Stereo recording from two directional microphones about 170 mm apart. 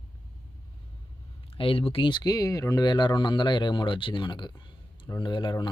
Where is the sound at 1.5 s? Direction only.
30° left (ahead or behind).